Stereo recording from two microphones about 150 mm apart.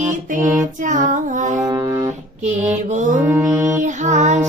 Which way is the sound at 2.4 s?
50° right (ahead or behind).